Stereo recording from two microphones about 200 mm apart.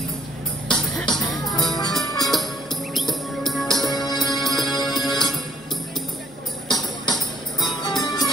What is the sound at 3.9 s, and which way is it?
Music, 20° left (ahead or behind).